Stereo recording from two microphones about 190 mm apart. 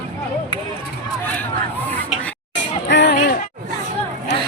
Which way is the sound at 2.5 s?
70° left (ahead or behind).